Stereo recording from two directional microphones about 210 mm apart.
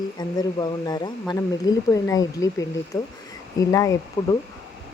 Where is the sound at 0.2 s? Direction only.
20° left (ahead or behind).